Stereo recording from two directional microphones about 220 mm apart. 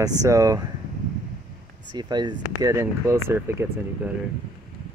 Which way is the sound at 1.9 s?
20° right (ahead or behind).